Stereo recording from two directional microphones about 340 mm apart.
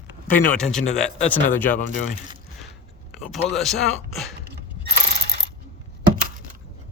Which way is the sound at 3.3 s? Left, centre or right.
Centre.